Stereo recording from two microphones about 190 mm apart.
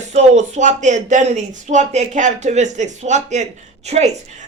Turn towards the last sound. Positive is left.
turn(degrees=-35)  # may be behind; listen again after turning